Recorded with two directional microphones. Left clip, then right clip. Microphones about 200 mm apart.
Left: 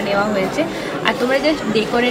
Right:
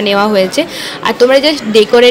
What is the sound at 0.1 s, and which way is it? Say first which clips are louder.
A woman's voice: right 7 dB; 50° right (ahead or behind).